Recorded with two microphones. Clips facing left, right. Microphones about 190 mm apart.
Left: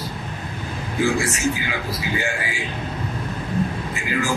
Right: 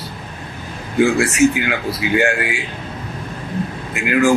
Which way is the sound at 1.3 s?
65° right (ahead or behind).